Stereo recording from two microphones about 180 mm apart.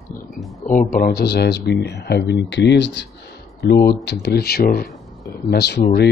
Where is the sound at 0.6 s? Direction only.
50° left (ahead or behind).